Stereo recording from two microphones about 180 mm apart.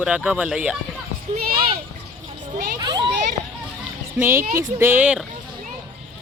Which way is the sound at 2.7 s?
25° right (ahead or behind).